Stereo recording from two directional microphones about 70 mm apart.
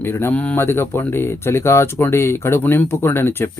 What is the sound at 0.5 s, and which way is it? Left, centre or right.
Speech, left.